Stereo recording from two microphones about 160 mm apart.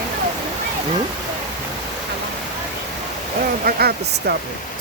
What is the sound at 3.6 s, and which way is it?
Speech, 75° right (ahead or behind).